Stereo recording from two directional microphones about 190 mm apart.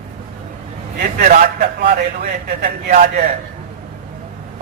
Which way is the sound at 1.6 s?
55° right (ahead or behind).